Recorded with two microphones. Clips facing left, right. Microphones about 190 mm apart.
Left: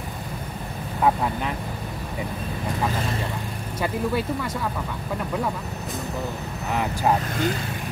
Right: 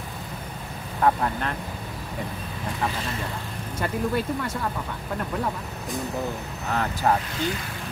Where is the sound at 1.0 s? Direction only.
5° left (ahead or behind).